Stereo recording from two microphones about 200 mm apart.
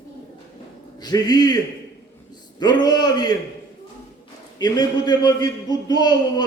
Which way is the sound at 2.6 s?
20° left (ahead or behind).